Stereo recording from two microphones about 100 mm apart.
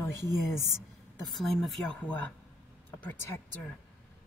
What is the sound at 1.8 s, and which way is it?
Speech, 15° left (ahead or behind).